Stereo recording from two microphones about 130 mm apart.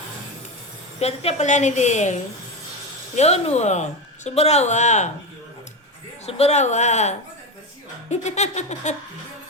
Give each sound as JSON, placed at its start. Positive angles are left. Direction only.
{"t": 0.9, "sound": "a woman's voice", "side_deg": 55}
{"t": 3.2, "sound": "a woman's voice", "side_deg": 55}
{"t": 6.2, "sound": "a woman's voice", "side_deg": 55}